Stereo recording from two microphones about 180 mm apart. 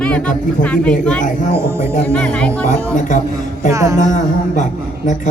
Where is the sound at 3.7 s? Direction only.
20° right (ahead or behind).